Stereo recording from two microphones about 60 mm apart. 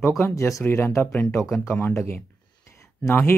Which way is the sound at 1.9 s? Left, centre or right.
Left.